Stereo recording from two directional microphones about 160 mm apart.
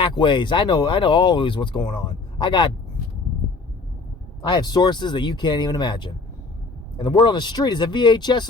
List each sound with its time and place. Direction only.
0.0 s speech: 30° left (ahead or behind)
4.4 s speech: 25° left (ahead or behind)